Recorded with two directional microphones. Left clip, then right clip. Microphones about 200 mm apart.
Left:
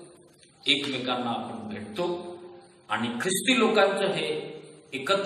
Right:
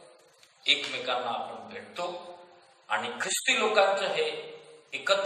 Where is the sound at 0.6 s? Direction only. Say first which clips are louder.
Left 1 dB; 35° left (ahead or behind).